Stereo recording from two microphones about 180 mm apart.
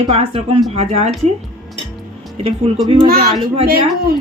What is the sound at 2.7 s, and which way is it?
Speech, 35° right (ahead or behind).